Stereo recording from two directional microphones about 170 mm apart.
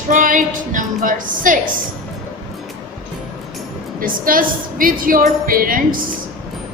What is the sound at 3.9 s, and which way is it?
A woman's voice, 55° right (ahead or behind).